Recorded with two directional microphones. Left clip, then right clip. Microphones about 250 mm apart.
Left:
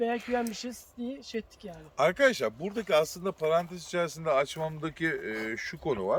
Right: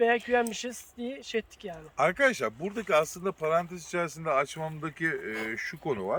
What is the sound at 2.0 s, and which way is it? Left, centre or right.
Speech, centre.